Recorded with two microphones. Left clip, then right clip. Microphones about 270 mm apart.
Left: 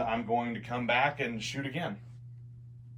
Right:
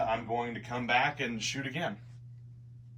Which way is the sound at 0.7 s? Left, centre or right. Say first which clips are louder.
Left 1 dB; centre.